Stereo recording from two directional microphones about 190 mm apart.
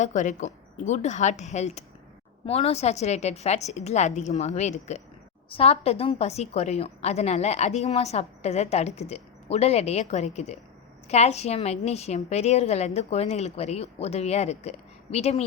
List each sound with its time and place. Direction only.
0.0 s a woman's voice: 40° left (ahead or behind)